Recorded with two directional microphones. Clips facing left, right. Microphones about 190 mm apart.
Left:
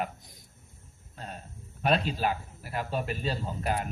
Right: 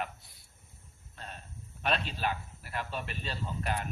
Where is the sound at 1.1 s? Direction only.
35° left (ahead or behind).